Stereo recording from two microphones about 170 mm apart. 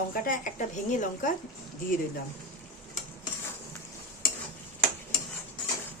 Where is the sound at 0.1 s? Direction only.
50° left (ahead or behind).